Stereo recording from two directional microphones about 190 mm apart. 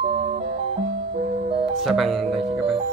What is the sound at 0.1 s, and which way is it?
Music, 35° right (ahead or behind).